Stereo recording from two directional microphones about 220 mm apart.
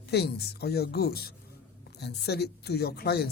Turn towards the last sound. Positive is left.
turn(degrees=45)  # may be behind; listen again after turning